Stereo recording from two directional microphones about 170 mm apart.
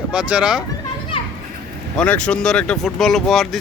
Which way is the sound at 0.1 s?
5° right (ahead or behind).